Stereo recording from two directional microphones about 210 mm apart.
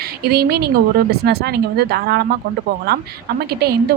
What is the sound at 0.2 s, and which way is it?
A woman's voice, 50° right (ahead or behind).